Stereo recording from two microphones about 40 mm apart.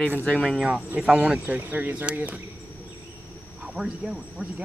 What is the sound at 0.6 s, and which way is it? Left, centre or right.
Speech, right.